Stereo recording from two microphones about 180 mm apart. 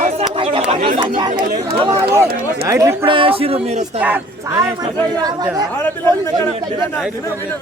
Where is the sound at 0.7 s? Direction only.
45° right (ahead or behind).